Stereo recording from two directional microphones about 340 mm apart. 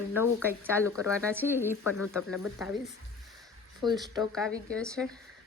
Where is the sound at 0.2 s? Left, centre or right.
Centre.